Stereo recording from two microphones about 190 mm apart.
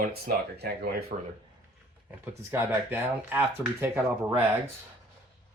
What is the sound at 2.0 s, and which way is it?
Speech, 10° right (ahead or behind).